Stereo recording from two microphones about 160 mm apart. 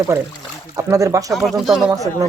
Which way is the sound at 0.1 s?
20° right (ahead or behind).